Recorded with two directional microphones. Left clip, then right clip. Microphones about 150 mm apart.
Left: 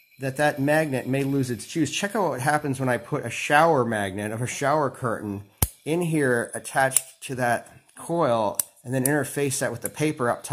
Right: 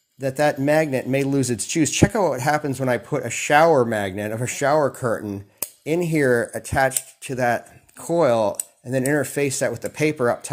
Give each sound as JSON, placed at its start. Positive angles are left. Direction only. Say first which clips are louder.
{"t": 0.2, "sound": "speech", "louder": "right 3 dB", "side_deg": -20}